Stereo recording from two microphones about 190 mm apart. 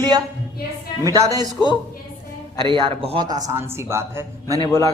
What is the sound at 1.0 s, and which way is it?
Speech, 20° right (ahead or behind).